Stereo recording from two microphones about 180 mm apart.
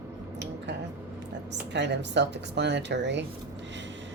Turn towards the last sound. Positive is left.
turn(degrees=-75)  # may be behind; listen again after turning